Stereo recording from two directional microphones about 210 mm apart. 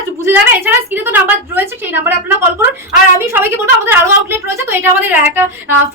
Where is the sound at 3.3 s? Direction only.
10° right (ahead or behind).